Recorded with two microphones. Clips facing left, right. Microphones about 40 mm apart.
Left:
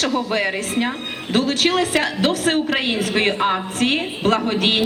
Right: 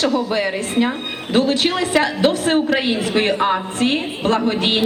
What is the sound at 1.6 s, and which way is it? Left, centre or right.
Speech, left.